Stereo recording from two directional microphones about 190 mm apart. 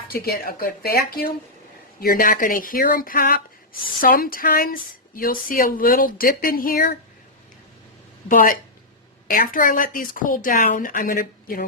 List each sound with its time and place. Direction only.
0.1 s speech: 50° left (ahead or behind)
8.3 s speech: 45° left (ahead or behind)